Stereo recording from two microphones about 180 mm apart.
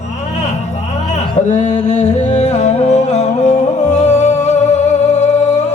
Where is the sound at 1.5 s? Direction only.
40° left (ahead or behind).